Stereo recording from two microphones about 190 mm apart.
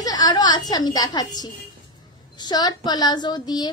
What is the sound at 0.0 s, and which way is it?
A woman's voice, 20° left (ahead or behind).